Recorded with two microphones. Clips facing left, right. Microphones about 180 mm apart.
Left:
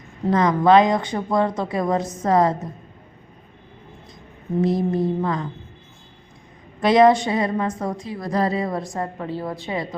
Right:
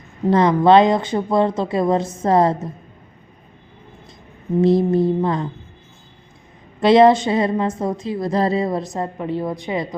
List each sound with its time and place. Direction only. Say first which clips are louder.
0.3 s a woman's voice: right 3 dB; 30° right (ahead or behind)
4.6 s a woman's voice: right 5 dB; 30° right (ahead or behind)
6.7 s a woman's voice: right 3 dB; 25° right (ahead or behind)